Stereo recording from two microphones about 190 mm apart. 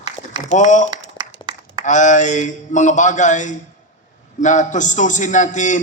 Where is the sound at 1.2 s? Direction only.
25° right (ahead or behind).